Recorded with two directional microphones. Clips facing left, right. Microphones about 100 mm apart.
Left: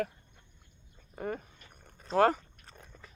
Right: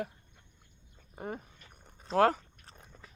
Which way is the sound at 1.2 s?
20° right (ahead or behind).